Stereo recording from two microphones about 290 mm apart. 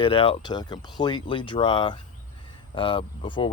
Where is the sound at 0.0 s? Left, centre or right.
Centre.